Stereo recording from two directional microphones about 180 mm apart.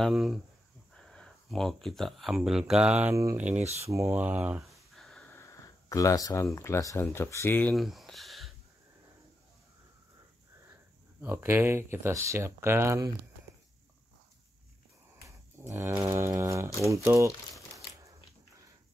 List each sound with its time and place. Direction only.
0.0 s speech: centre (ahead or behind)
7.7 s a sound: centre (ahead or behind)
11.1 s speech: 10° right (ahead or behind)
15.2 s speech: 15° right (ahead or behind)